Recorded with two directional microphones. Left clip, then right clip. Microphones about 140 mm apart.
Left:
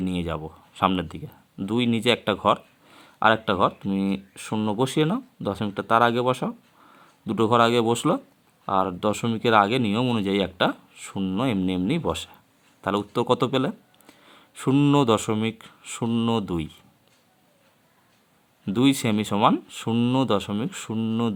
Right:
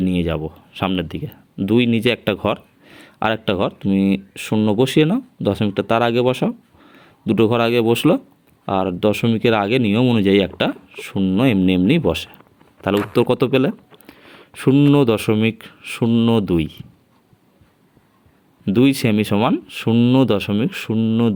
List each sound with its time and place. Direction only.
0.0 s speech: 20° right (ahead or behind)
11.4 s speech: 30° right (ahead or behind)
18.6 s speech: 25° right (ahead or behind)